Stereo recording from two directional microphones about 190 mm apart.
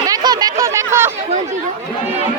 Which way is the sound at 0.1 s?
20° right (ahead or behind).